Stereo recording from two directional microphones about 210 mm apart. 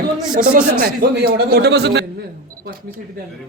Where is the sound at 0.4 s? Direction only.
45° right (ahead or behind).